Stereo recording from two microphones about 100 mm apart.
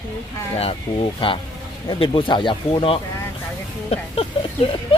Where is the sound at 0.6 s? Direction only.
70° left (ahead or behind).